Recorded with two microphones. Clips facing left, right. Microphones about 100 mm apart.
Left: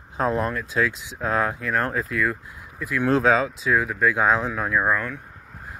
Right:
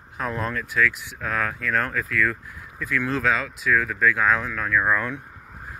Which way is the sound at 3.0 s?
35° left (ahead or behind).